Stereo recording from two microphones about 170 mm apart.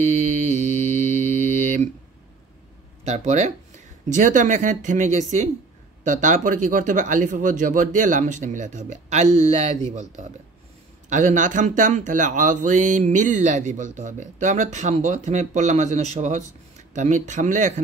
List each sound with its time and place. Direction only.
0.0 s mantra: 45° right (ahead or behind)
3.1 s speech: 40° right (ahead or behind)